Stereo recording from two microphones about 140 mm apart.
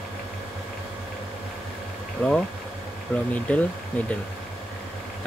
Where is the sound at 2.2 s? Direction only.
10° left (ahead or behind).